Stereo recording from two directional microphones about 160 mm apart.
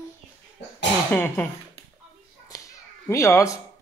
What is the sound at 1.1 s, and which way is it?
Speech, 10° left (ahead or behind).